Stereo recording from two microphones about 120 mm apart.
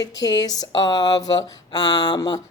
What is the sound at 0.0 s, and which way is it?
Speech, 35° left (ahead or behind).